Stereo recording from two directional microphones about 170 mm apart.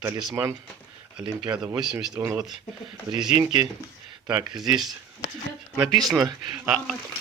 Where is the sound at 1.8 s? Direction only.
5° right (ahead or behind).